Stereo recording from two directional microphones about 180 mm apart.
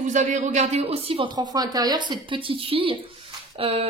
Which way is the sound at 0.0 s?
40° right (ahead or behind).